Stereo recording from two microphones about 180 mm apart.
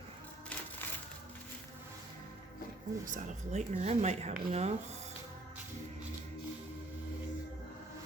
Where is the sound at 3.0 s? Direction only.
45° right (ahead or behind).